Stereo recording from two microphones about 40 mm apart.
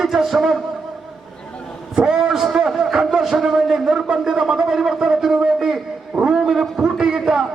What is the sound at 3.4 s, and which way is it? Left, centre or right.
A man's voice, centre.